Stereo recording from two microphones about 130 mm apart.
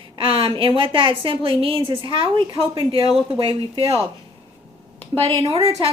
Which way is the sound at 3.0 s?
35° left (ahead or behind).